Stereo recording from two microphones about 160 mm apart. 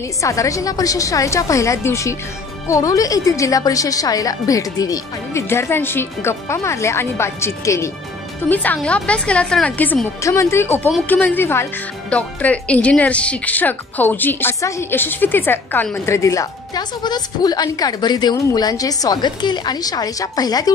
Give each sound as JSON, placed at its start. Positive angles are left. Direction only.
{"t": 0.2, "sound": "a woman's voice", "side_deg": 20}